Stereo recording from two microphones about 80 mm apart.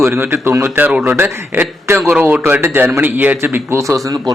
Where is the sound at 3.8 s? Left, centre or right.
Right.